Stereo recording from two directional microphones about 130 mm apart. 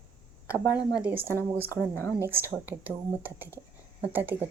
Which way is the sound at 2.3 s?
15° right (ahead or behind).